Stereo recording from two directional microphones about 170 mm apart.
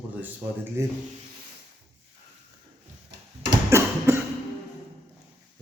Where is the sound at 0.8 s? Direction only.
15° right (ahead or behind).